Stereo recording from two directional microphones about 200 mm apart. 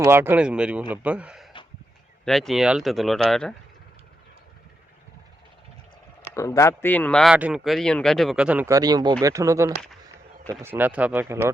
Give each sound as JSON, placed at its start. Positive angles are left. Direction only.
{"t": 0.0, "sound": "a man's voice", "side_deg": -10}
{"t": 6.3, "sound": "a man's voice", "side_deg": 15}